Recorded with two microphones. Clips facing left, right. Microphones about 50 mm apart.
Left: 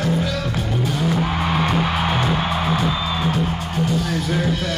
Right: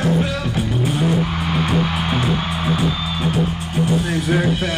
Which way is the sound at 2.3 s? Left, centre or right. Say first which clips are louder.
Even; centre.